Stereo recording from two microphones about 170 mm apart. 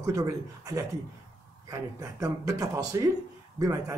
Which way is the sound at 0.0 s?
20° right (ahead or behind).